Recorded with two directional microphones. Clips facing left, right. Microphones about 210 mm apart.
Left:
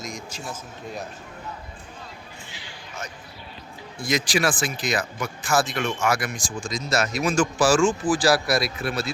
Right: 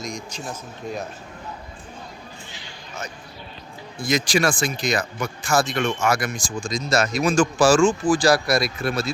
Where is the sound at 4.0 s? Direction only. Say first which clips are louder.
Right 2 dB; centre (ahead or behind).